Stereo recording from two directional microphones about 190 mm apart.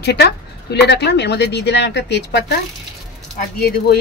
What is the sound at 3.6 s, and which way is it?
Speech, 55° left (ahead or behind).